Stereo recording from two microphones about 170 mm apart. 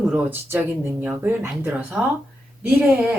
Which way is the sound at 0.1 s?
10° right (ahead or behind).